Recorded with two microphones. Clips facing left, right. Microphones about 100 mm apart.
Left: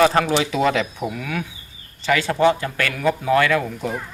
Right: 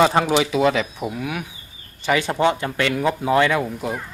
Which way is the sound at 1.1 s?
15° right (ahead or behind).